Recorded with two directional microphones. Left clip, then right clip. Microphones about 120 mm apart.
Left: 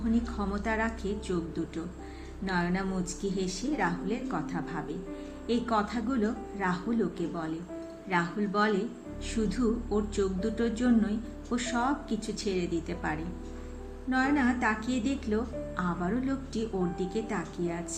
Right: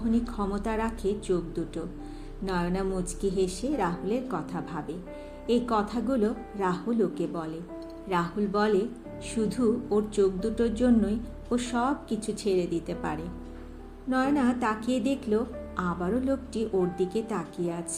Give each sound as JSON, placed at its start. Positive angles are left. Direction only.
{"t": 0.1, "sound": "a woman's voice", "side_deg": -40}
{"t": 1.3, "sound": "speech", "side_deg": -25}
{"t": 2.5, "sound": "a woman's voice", "side_deg": -40}